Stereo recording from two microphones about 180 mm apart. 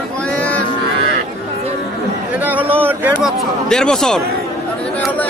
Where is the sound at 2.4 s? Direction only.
10° right (ahead or behind).